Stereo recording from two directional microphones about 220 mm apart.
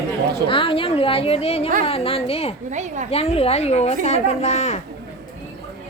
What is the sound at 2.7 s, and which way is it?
Speech, 35° right (ahead or behind).